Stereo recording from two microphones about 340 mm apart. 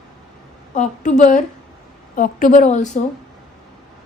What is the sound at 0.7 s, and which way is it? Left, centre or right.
A woman's voice, left.